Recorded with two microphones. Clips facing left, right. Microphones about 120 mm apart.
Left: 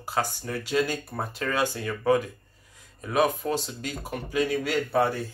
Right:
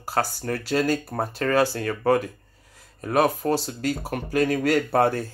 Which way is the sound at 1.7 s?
50° right (ahead or behind).